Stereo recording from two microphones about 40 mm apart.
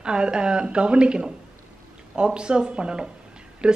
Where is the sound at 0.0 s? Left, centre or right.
Right.